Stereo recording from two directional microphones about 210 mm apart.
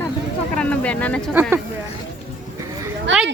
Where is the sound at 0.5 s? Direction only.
5° left (ahead or behind).